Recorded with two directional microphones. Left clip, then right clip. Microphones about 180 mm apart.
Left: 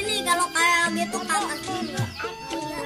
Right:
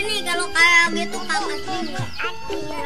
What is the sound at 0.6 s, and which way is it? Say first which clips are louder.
Music: right 10 dB; 5° left (ahead or behind).